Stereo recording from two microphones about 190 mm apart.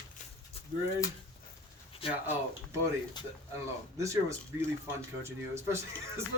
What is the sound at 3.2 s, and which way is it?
Speech, 20° left (ahead or behind).